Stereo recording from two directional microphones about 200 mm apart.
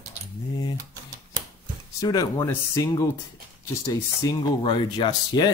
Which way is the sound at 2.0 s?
15° left (ahead or behind).